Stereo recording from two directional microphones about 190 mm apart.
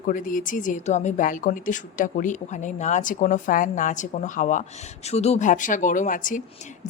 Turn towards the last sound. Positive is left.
turn(degrees=45)  # may be behind; listen again after turning